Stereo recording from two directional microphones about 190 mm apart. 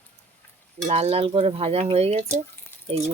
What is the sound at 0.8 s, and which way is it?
Speech, 35° right (ahead or behind).